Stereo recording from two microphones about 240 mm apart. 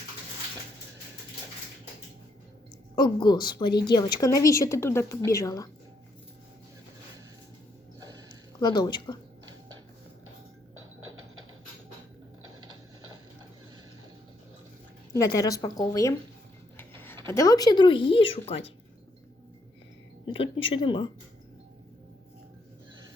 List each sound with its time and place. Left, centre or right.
2.9 s a woman's voice: centre
7.9 s a sound: centre
8.5 s a woman's voice: centre
15.1 s a woman's voice: centre
16.7 s a sound: centre
17.2 s speech: centre
20.2 s speech: left